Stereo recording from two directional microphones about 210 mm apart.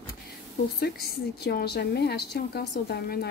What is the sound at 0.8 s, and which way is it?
A woman's voice, 50° left (ahead or behind).